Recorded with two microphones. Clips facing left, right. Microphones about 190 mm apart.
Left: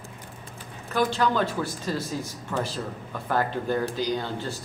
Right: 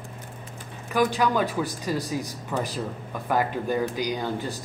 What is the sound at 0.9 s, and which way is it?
Speech, 10° right (ahead or behind).